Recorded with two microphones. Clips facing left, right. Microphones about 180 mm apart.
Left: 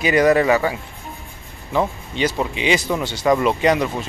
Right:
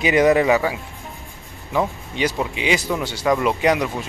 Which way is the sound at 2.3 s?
5° right (ahead or behind).